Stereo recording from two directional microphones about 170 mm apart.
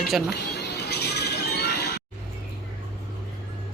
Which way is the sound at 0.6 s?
75° left (ahead or behind).